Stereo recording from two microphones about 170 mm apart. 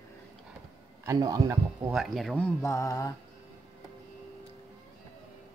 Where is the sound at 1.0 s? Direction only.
20° right (ahead or behind).